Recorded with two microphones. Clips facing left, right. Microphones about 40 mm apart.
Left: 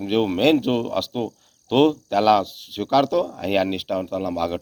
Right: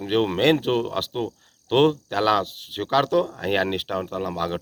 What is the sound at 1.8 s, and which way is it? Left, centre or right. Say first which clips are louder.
Speech: left 2 dB; right.